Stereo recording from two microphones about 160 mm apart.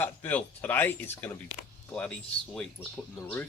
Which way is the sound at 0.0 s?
10° left (ahead or behind).